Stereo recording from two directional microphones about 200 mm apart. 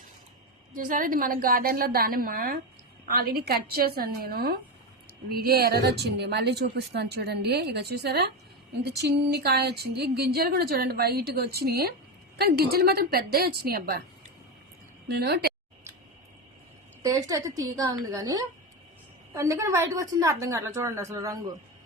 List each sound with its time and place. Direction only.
0.7 s a woman's voice: 40° right (ahead or behind)
15.0 s a woman's voice: 55° right (ahead or behind)
17.0 s a woman's voice: 15° right (ahead or behind)